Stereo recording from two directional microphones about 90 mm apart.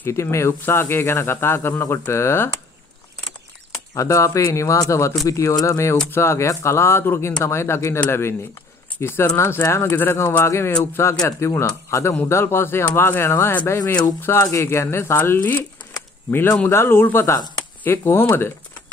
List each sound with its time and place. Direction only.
0.0 s speech: 30° left (ahead or behind)
3.9 s speech: 35° left (ahead or behind)